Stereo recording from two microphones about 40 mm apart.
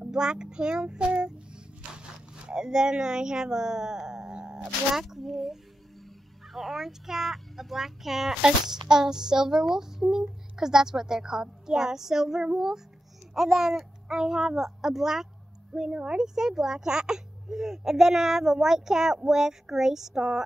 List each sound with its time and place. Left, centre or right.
0.1 s speech: centre
5.0 s a child's voice: centre
15.7 s speech: right